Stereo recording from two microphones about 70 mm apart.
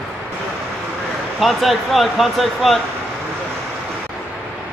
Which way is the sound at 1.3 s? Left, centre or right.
Centre.